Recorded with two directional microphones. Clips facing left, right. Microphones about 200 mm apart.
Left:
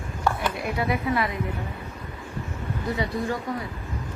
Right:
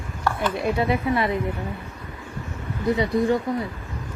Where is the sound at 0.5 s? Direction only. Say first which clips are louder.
Right 4 dB; 25° right (ahead or behind).